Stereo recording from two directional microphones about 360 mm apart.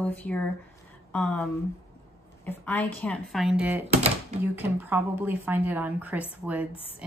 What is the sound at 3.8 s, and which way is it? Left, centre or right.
Speech, centre.